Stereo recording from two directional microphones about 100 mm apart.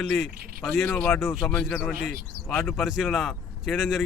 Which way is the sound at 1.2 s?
Centre (ahead or behind).